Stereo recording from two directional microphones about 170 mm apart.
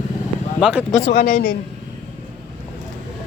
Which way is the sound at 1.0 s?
65° left (ahead or behind).